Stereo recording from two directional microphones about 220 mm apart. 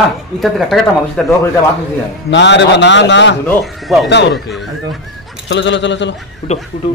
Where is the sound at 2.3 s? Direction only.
55° left (ahead or behind).